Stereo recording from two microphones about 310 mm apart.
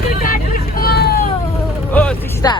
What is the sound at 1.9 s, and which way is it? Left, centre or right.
Speech, centre.